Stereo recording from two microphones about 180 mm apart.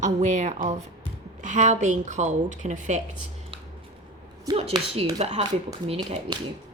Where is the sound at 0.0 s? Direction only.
40° right (ahead or behind).